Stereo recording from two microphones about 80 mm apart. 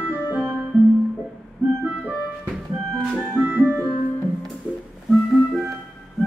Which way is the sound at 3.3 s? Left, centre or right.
Centre.